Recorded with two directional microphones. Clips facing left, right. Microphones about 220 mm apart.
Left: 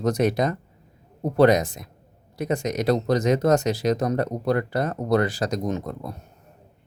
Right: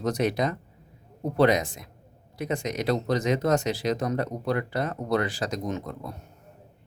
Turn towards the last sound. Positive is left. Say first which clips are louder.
# left 4 dB
turn(degrees=40)  # may be behind; listen again after turning